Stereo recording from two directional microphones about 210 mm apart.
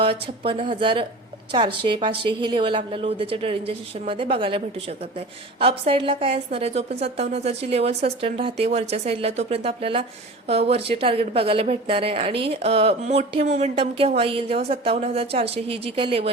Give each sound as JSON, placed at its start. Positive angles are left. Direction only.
{"t": 0.0, "sound": "a woman's voice", "side_deg": -25}